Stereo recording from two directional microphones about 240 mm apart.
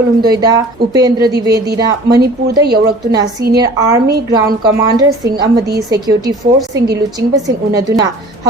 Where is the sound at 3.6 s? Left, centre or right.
Centre.